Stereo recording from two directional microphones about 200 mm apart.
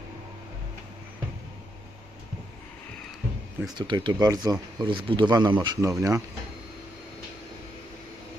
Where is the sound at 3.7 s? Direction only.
25° right (ahead or behind).